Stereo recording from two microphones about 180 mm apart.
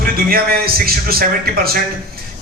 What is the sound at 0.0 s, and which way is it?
A man's voice, 55° right (ahead or behind).